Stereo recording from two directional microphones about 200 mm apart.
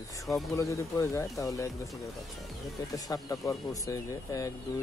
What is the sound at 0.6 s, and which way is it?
Speech, 15° left (ahead or behind).